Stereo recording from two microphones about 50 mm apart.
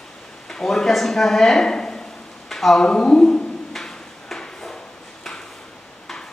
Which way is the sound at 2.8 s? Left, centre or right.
Centre.